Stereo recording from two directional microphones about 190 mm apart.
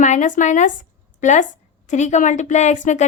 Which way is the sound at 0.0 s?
40° left (ahead or behind).